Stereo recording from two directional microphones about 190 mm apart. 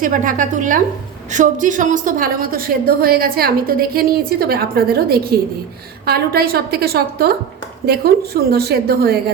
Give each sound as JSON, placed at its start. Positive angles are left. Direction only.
{"t": 0.0, "sound": "a woman's voice", "side_deg": -45}